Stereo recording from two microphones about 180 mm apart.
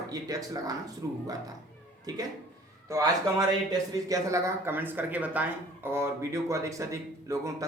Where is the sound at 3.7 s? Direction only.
20° right (ahead or behind).